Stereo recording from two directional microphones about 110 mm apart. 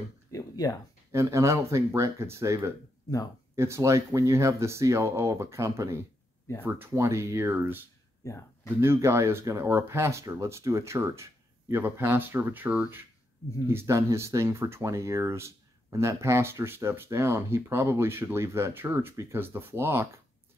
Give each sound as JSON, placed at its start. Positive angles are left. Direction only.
{"t": 0.3, "sound": "a sound", "side_deg": 30}
{"t": 1.1, "sound": "speech", "side_deg": -25}
{"t": 8.2, "sound": "speech", "side_deg": 25}
{"t": 8.8, "sound": "speech", "side_deg": -25}